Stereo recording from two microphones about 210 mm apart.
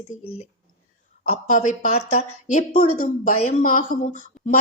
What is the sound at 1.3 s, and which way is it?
A woman's voice, 35° left (ahead or behind).